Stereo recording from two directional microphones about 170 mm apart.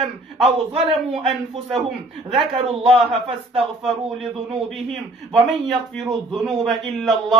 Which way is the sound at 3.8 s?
Centre (ahead or behind).